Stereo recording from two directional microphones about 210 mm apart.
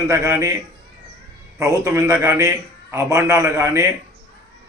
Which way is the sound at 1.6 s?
15° right (ahead or behind).